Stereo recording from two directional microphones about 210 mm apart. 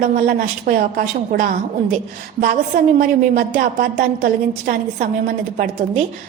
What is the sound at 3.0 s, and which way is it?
A woman's voice, 40° right (ahead or behind).